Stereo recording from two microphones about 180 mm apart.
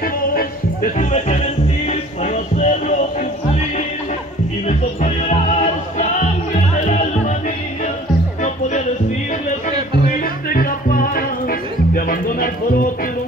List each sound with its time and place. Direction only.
0.9 s speech: 40° left (ahead or behind)
1.9 s music: 45° left (ahead or behind)
4.6 s music: 40° left (ahead or behind)
9.7 s music: 50° left (ahead or behind)